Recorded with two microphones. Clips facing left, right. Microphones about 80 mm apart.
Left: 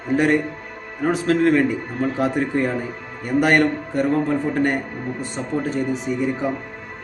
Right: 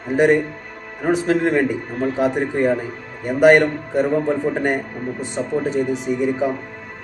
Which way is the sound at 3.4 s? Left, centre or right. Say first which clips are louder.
Right 5 dB; centre.